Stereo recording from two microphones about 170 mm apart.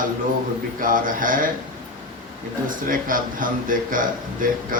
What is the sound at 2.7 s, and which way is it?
A man's voice, 55° right (ahead or behind).